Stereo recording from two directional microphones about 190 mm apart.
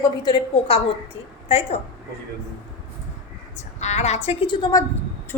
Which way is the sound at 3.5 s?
35° left (ahead or behind).